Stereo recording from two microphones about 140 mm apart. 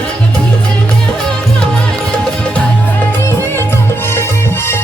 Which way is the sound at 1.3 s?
5° left (ahead or behind).